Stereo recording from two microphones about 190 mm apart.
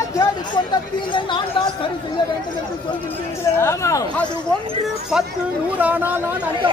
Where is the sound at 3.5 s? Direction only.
15° left (ahead or behind).